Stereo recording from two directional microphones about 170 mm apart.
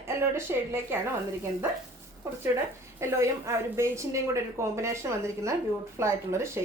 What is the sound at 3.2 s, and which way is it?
A woman's voice, 15° right (ahead or behind).